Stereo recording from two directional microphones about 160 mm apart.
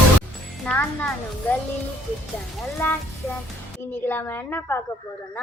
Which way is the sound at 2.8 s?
10° left (ahead or behind).